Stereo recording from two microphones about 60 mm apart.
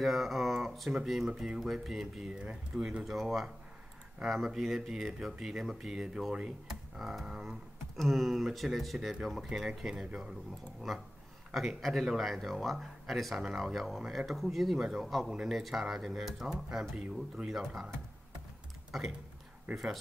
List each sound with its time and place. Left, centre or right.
0.0 s speech: centre
10.9 s speech: centre
16.9 s speech: centre
18.9 s speech: centre